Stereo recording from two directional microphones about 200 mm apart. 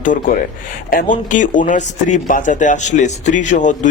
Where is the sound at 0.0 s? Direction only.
40° left (ahead or behind).